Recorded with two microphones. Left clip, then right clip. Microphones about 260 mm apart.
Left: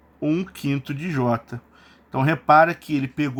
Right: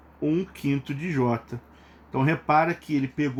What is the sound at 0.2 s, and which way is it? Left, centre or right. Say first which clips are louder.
Speech: left 2 dB; left.